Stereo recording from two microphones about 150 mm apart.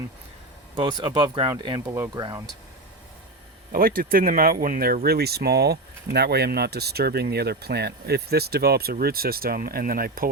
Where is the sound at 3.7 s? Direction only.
70° right (ahead or behind).